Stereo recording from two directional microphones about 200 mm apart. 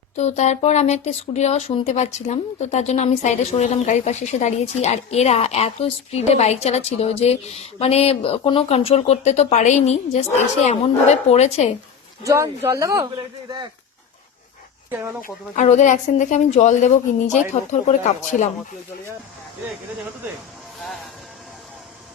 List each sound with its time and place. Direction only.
0.2 s speech: 35° left (ahead or behind)
12.2 s speech: 15° right (ahead or behind)
15.2 s speech: 35° left (ahead or behind)